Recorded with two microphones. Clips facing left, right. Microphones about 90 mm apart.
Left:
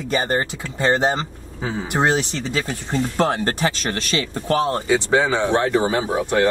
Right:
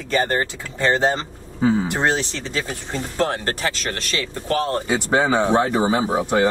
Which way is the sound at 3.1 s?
20° left (ahead or behind).